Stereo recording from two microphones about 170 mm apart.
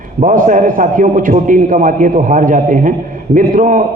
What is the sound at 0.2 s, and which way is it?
A man's voice, 50° right (ahead or behind).